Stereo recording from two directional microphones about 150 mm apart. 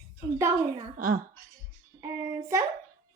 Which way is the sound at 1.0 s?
65° right (ahead or behind).